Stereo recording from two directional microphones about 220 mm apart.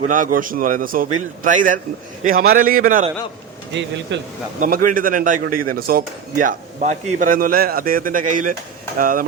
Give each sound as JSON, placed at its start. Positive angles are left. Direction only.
{"t": 0.1, "sound": "a man's voice", "side_deg": -40}
{"t": 4.1, "sound": "speech", "side_deg": -55}
{"t": 4.6, "sound": "a man's voice", "side_deg": -40}